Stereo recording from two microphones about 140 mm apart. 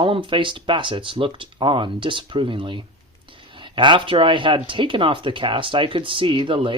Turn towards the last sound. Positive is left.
turn(degrees=-40)  # may be behind; listen again after turning